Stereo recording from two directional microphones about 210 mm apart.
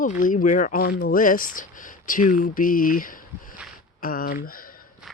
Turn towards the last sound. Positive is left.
turn(degrees=40)  # may be behind; listen again after turning